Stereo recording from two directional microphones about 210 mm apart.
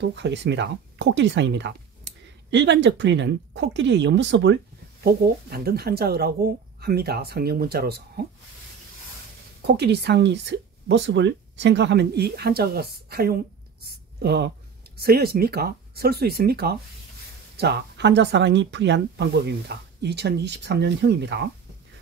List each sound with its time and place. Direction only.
0.0 s speech: 55° right (ahead or behind)
9.7 s speech: 55° right (ahead or behind)